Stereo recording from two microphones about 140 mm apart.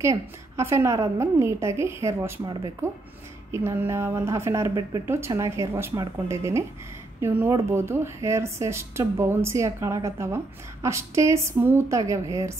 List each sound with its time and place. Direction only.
0.0 s a woman's voice: 20° right (ahead or behind)
2.4 s speech: 30° right (ahead or behind)
3.5 s a woman's voice: 20° right (ahead or behind)